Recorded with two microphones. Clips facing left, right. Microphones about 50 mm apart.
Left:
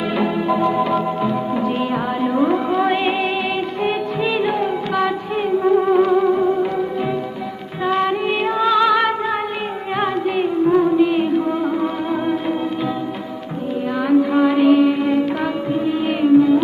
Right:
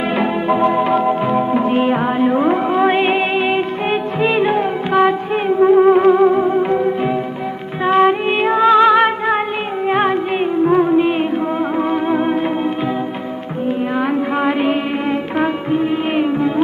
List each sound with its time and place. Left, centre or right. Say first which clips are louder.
0.1 s music: right 2 dB; right
7.9 s music: right 5 dB; right
14.1 s music: left 2 dB; right